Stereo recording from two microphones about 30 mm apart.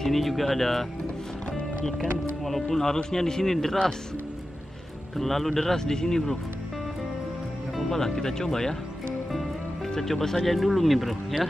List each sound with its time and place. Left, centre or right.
0.0 s speech: centre
2.4 s a man's voice: centre
5.1 s a man's voice: centre
7.9 s a man's voice: centre
9.8 s a man's voice: centre